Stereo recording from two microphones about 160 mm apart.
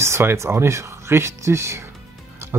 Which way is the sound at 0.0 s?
15° right (ahead or behind).